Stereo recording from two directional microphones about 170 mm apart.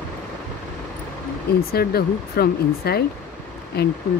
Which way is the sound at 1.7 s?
65° left (ahead or behind).